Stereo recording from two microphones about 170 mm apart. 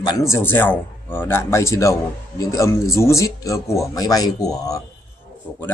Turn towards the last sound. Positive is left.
turn(degrees=20)  # may be behind; listen again after turning